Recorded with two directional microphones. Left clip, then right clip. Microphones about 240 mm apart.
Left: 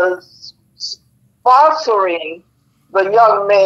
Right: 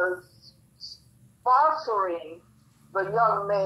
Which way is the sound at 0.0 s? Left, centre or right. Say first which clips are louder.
Left 11 dB; left.